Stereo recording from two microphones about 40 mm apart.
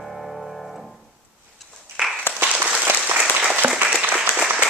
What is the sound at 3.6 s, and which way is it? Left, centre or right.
Applause, right.